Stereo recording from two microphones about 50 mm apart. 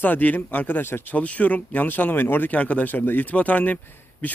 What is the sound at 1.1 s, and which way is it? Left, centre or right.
Speech, left.